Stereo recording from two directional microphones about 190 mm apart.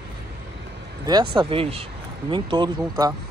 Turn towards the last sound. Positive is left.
turn(degrees=-20)  # may be behind; listen again after turning